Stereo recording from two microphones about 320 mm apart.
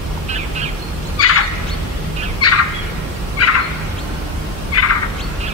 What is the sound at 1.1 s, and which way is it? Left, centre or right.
Turkey, left.